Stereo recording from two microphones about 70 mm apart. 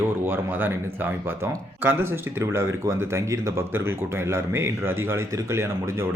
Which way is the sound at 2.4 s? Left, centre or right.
Right.